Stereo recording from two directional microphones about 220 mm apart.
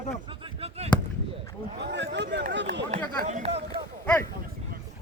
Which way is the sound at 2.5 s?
55° right (ahead or behind).